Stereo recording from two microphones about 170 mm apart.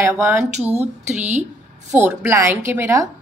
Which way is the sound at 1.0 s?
40° right (ahead or behind).